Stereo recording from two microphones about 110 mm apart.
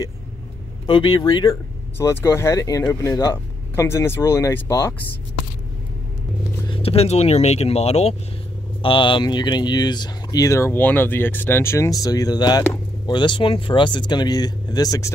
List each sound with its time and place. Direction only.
0.8 s speech: 45° left (ahead or behind)
2.0 s speech: 25° left (ahead or behind)
6.7 s speech: 60° left (ahead or behind)
8.8 s speech: 50° left (ahead or behind); by 15.1 s 30° left (ahead or behind)